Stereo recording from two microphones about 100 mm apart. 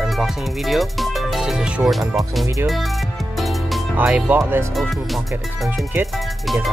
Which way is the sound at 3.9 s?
15° right (ahead or behind).